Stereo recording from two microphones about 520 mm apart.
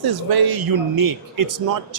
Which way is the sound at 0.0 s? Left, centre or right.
Right.